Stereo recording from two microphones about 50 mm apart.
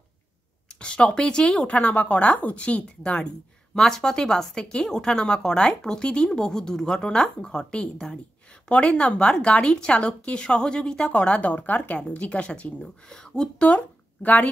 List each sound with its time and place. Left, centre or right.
0.7 s speech: left
3.7 s a woman's voice: centre; by 12.9 s left
13.1 s a woman's voice: centre
13.7 s speech: left